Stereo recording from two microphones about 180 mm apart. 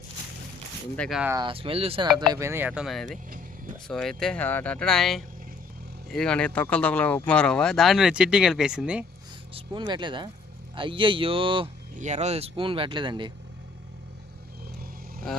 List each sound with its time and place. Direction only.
0.9 s speech: 5° left (ahead or behind)
1.4 s speech: 30° right (ahead or behind)
2.3 s speech: 15° right (ahead or behind)
9.5 s speech: 30° right (ahead or behind)
11.9 s speech: 40° right (ahead or behind)